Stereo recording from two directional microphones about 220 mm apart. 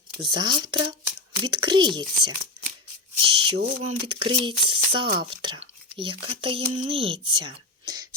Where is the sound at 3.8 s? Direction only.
25° right (ahead or behind).